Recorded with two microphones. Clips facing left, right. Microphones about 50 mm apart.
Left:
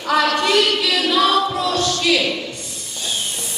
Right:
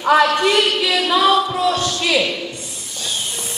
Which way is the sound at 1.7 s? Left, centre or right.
Right.